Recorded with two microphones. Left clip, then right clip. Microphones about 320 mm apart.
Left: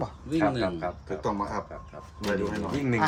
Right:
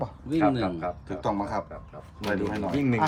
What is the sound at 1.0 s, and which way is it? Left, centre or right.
Speech, right.